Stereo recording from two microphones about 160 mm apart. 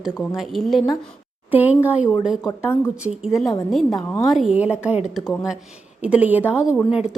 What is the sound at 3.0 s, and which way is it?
A woman's voice, 5° right (ahead or behind).